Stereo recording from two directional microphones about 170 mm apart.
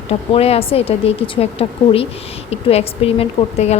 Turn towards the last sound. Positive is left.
turn(degrees=40)  # may be behind; listen again after turning